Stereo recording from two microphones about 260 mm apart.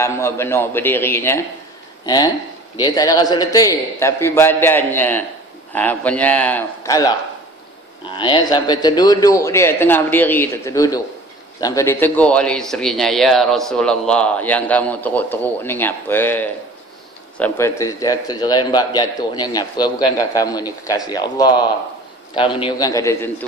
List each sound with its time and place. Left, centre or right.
0.0 s a man's voice: centre